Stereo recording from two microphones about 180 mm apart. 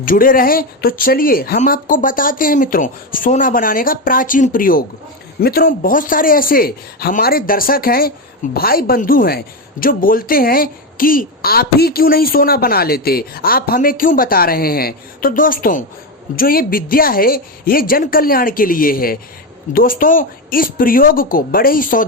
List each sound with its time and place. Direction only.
0.0 s speech: 50° left (ahead or behind)